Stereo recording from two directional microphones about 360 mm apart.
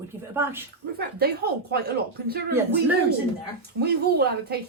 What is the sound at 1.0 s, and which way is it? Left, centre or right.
Speech, right.